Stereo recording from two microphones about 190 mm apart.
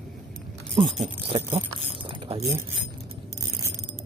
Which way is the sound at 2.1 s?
30° right (ahead or behind).